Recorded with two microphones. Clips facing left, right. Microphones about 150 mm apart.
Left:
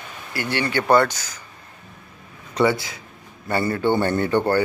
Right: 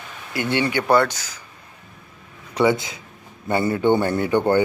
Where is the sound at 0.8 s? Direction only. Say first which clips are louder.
Left 1 dB; 5° right (ahead or behind).